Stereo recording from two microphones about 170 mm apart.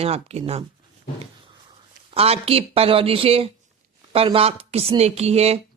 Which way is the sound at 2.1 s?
35° right (ahead or behind).